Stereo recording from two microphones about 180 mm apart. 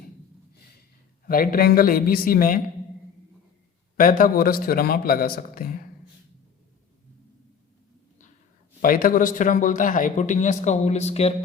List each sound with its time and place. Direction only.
1.3 s a man's voice: 50° left (ahead or behind)
3.9 s a man's voice: 50° left (ahead or behind)
8.8 s a man's voice: 50° left (ahead or behind); by 11.3 s 35° left (ahead or behind)